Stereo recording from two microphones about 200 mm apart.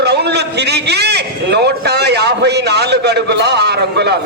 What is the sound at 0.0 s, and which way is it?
A man's voice, 55° right (ahead or behind).